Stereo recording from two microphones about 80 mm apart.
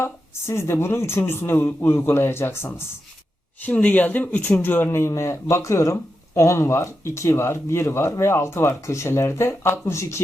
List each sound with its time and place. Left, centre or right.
0.0 s speech: left
3.6 s speech: left